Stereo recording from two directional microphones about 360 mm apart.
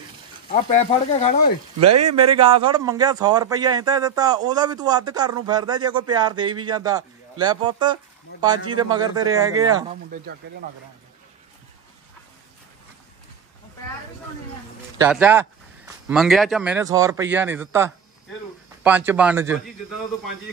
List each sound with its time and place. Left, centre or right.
0.5 s speech: centre
1.8 s speech: right
2.1 s a man's voice: centre
15.0 s speech: centre